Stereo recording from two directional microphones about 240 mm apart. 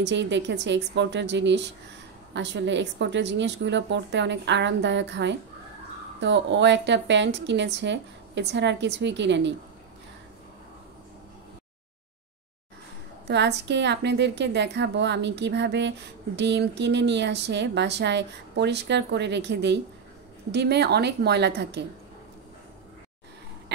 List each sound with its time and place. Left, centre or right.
0.0 s speech: right
13.3 s speech: right